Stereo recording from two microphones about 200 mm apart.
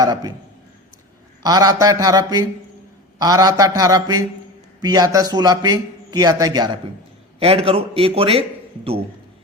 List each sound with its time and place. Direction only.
0.0 s a man's voice: 20° right (ahead or behind)
1.4 s a man's voice: 20° right (ahead or behind)
3.8 s a sound: 20° right (ahead or behind)
4.8 s a man's voice: 20° right (ahead or behind)